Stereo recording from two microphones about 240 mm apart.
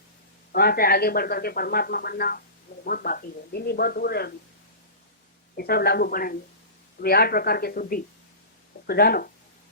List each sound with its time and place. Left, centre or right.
0.5 s speech: left
5.5 s speech: left